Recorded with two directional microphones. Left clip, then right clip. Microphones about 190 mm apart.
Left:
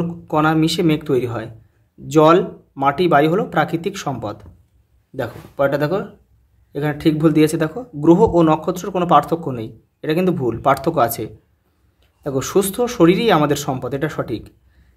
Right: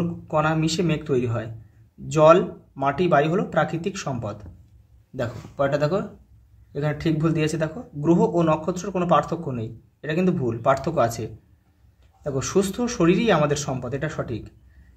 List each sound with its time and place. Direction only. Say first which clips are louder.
0.3 s speech: left 6 dB; 35° left (ahead or behind)